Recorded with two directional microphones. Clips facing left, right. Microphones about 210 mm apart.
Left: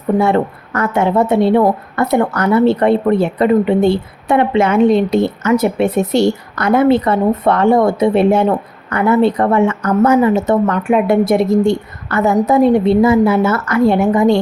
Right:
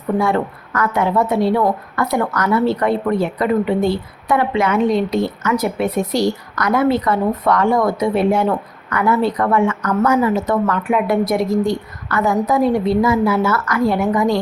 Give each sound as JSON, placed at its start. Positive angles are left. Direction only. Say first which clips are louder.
{"t": 0.1, "sound": "a woman's voice", "louder": "left 4 dB", "side_deg": 30}